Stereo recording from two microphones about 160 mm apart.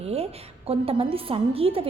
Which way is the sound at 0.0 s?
40° right (ahead or behind).